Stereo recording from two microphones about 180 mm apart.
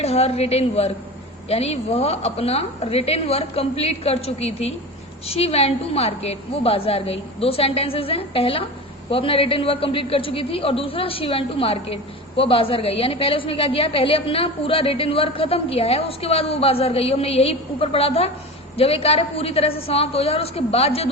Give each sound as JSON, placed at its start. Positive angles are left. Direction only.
{"t": 0.0, "sound": "a woman's voice", "side_deg": 35}